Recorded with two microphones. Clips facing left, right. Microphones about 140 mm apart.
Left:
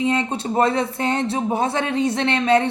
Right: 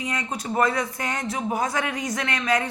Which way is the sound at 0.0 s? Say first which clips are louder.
Left 8 dB; 25° left (ahead or behind).